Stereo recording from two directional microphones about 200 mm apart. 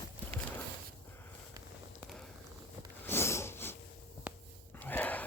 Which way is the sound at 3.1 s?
15° left (ahead or behind).